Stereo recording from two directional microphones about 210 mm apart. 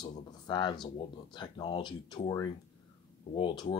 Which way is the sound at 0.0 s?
20° left (ahead or behind).